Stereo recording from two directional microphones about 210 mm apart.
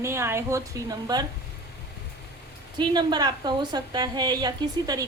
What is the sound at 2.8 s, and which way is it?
A woman's voice, 20° right (ahead or behind).